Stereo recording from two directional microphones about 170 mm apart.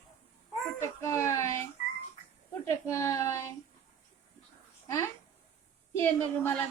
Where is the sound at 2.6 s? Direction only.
15° left (ahead or behind).